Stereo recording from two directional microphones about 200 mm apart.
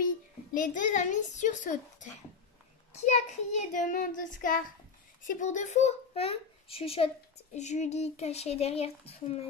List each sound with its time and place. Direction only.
0.6 s speech: 40° left (ahead or behind)
3.1 s child singing: 40° left (ahead or behind)
5.2 s a child's voice: 40° left (ahead or behind)